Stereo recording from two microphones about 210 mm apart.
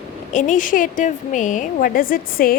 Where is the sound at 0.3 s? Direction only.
35° left (ahead or behind).